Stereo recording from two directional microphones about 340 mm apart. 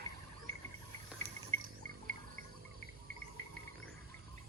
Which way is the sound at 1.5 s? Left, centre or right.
Right.